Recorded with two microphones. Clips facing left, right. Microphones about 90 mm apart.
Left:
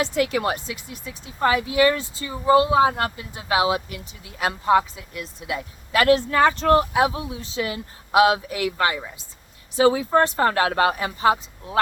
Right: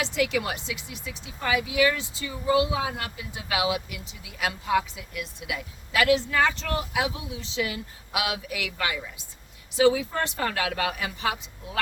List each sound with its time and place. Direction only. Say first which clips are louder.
0.0 s speech: left 4 dB; 40° left (ahead or behind)